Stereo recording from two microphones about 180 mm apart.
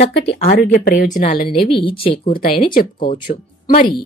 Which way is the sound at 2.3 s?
50° left (ahead or behind).